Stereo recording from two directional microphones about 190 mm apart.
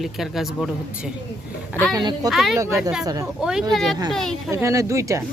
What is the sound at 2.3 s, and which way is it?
Speech, centre (ahead or behind).